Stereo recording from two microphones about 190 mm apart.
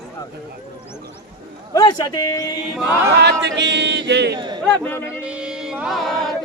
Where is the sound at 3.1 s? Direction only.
65° right (ahead or behind).